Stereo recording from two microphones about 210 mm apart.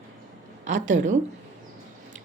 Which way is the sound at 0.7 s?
60° right (ahead or behind).